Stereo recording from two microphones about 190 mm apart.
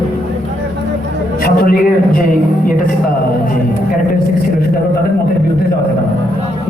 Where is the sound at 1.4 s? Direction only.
50° left (ahead or behind).